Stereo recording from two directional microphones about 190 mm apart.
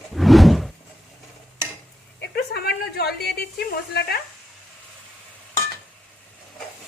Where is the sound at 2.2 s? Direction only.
55° left (ahead or behind).